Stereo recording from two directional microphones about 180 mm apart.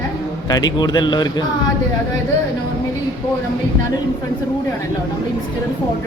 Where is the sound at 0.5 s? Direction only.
20° left (ahead or behind).